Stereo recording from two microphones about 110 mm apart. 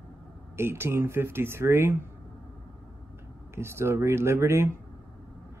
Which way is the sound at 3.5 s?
25° right (ahead or behind).